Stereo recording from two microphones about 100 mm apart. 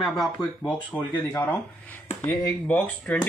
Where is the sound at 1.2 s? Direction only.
40° left (ahead or behind).